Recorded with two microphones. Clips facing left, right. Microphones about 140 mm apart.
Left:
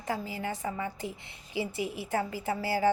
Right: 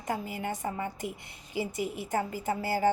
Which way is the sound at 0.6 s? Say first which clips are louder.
Even; 30° right (ahead or behind).